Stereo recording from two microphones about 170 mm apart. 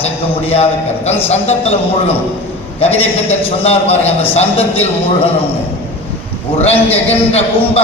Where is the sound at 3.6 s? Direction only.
35° left (ahead or behind).